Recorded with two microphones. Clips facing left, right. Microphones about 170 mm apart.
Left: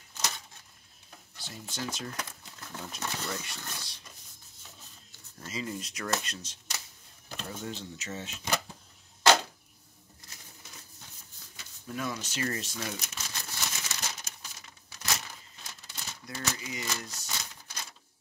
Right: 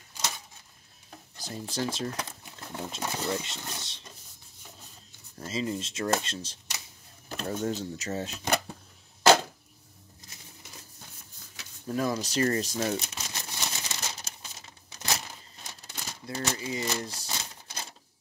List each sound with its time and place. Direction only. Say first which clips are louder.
1.4 s speech: right 6 dB; 35° right (ahead or behind)
5.4 s speech: right 5 dB; 30° right (ahead or behind)
7.2 s a sound: right 7 dB; 45° right (ahead or behind)
7.6 s speech: right 8 dB; 45° right (ahead or behind)
11.9 s crumpling: right 7 dB; 35° right (ahead or behind)
16.9 s typewriter: right 5 dB; 30° right (ahead or behind)